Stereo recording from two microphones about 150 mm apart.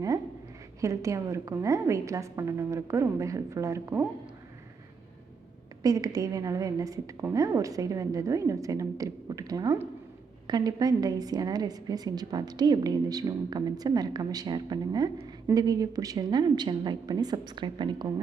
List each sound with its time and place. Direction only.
0.8 s a woman's voice: 20° right (ahead or behind)
5.8 s a woman's voice: 25° right (ahead or behind)